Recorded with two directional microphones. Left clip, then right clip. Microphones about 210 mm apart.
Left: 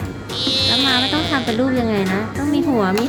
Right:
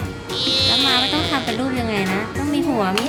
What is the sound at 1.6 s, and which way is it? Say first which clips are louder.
Speech: left 3 dB; 15° left (ahead or behind).